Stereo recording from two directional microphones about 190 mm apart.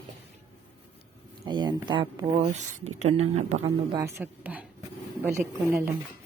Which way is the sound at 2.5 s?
35° right (ahead or behind).